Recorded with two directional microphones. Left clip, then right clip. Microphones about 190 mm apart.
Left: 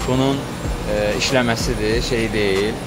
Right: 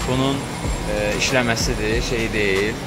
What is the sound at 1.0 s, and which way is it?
Speech, 20° left (ahead or behind).